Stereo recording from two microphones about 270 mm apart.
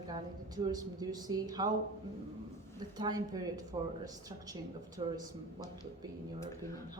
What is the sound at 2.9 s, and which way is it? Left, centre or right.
A woman's voice, centre.